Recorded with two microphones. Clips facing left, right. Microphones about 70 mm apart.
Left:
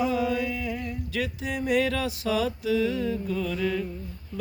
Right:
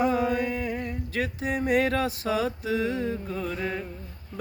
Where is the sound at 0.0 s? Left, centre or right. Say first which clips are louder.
Right 1 dB; right.